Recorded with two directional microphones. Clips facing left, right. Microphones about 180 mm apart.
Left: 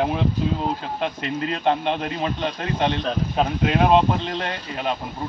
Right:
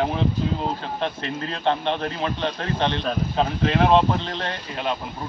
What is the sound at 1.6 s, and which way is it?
Speech, 15° left (ahead or behind).